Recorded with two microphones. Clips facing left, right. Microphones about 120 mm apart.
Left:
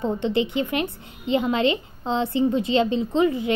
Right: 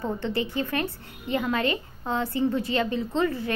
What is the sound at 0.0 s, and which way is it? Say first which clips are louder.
A woman's voice: left 5 dB; 20° left (ahead or behind).